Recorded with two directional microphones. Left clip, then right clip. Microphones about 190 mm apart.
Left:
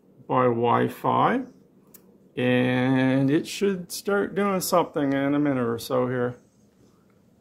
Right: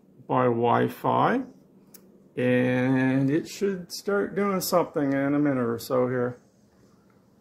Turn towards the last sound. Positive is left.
turn(degrees=0)  # may be behind; listen again after turning